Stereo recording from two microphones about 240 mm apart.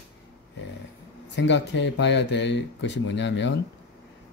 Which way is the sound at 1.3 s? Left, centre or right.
Left.